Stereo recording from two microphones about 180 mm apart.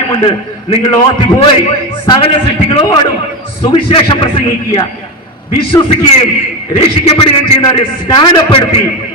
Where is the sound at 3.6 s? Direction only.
25° left (ahead or behind).